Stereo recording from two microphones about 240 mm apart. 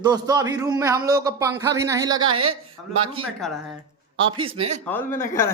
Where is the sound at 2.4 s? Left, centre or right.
Right.